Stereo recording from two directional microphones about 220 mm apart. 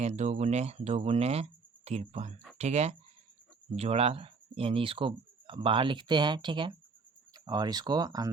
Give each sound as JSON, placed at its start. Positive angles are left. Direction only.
{"t": 0.0, "sound": "speech", "side_deg": -30}